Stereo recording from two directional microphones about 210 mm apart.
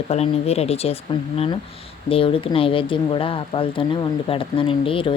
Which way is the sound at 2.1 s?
25° left (ahead or behind).